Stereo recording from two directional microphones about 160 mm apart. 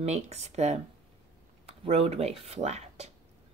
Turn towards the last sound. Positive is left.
turn(degrees=-45)  # may be behind; listen again after turning